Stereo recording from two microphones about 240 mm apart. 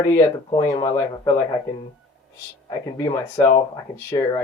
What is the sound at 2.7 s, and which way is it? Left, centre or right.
Speech, centre.